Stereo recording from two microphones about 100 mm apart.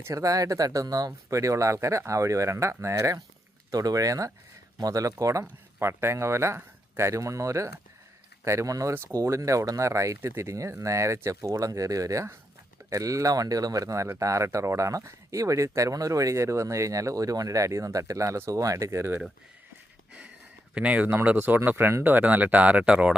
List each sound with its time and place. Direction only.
0.0 s speech: 35° right (ahead or behind)
20.7 s speech: 10° right (ahead or behind)